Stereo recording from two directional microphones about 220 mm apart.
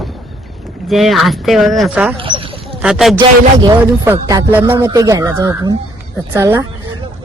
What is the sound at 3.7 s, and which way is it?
Speech, 15° right (ahead or behind).